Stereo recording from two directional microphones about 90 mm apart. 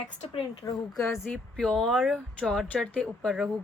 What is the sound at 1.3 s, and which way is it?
A woman's voice, 5° left (ahead or behind).